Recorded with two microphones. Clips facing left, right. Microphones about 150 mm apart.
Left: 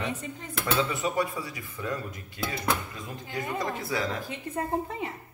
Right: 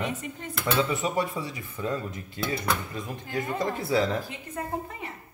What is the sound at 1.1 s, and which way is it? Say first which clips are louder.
Speech: right 1 dB; 25° right (ahead or behind).